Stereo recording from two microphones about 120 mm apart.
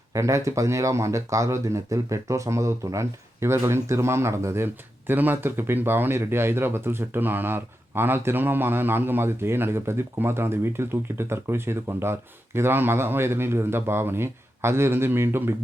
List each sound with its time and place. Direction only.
0.1 s speech: 25° right (ahead or behind)